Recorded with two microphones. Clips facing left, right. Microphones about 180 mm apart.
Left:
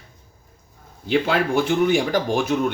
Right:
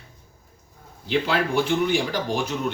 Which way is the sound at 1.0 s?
50° left (ahead or behind).